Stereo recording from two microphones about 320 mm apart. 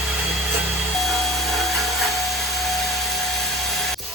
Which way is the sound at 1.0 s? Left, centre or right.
Centre.